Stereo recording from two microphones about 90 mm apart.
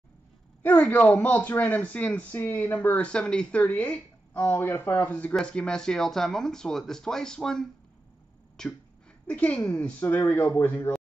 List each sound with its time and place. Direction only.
0.6 s speech: 20° left (ahead or behind)
8.6 s a sound: 5° left (ahead or behind)
9.3 s a woman's voice: 15° left (ahead or behind)
10.0 s speech: 30° left (ahead or behind)